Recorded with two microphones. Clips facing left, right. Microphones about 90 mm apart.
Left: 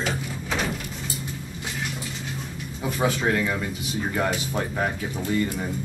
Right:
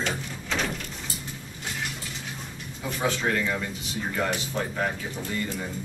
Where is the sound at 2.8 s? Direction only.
10° left (ahead or behind).